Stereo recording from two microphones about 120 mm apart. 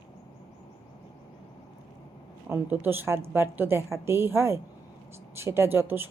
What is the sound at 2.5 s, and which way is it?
Speech, 20° right (ahead or behind).